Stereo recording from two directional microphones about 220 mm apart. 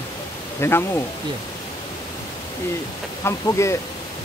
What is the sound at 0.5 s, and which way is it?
Speech, 10° left (ahead or behind).